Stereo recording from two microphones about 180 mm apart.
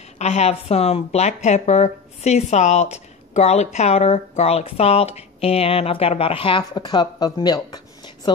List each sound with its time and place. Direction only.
0.2 s speech: 35° left (ahead or behind)